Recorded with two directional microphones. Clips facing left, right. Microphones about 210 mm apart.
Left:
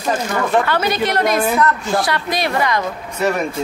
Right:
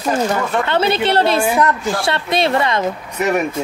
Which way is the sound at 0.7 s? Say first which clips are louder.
Right 2 dB; 25° right (ahead or behind).